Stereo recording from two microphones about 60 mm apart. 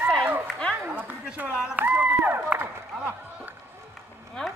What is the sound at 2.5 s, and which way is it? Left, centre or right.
Speech, right.